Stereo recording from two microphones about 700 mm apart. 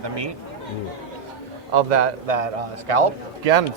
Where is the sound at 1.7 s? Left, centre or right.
Right.